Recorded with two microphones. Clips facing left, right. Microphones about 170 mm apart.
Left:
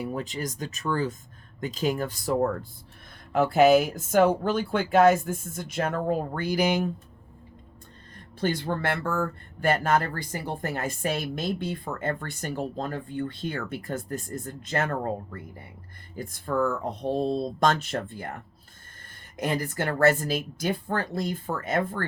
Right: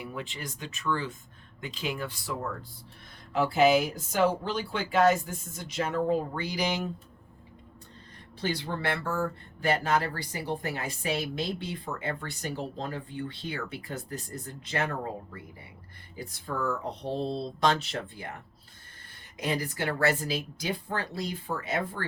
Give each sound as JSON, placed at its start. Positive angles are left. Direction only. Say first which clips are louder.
{"t": 0.0, "sound": "speech", "louder": "left 7 dB", "side_deg": 40}
{"t": 8.4, "sound": "speech", "louder": "left 5 dB", "side_deg": 50}